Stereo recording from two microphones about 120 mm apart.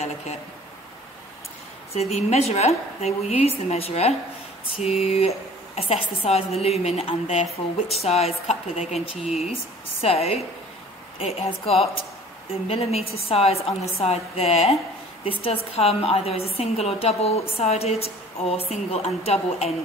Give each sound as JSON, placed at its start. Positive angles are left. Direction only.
{"t": 2.0, "sound": "a woman's voice", "side_deg": 60}
{"t": 9.2, "sound": "speech", "side_deg": -5}
{"t": 10.0, "sound": "a woman's voice", "side_deg": 60}